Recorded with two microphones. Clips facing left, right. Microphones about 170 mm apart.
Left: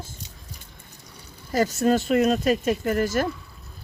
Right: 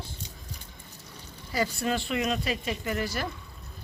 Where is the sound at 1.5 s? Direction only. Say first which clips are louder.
Left 8 dB; 45° left (ahead or behind).